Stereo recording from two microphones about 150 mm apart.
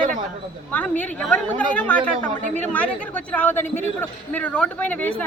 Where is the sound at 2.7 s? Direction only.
10° left (ahead or behind).